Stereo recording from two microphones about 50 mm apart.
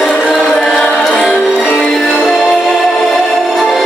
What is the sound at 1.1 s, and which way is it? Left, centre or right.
Music, centre.